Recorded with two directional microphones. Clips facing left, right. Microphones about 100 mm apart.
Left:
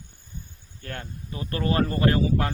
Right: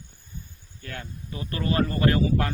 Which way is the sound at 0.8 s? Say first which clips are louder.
Left 1 dB; 45° left (ahead or behind).